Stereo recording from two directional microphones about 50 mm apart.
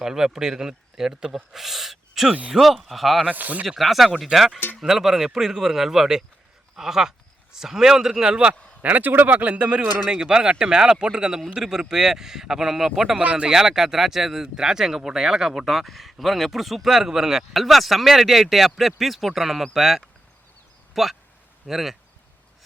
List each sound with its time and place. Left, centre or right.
0.0 s speech: centre
3.2 s speech: right
3.7 s speech: centre
8.8 s speech: right
9.8 s speech: centre
13.2 s speech: right
13.5 s speech: centre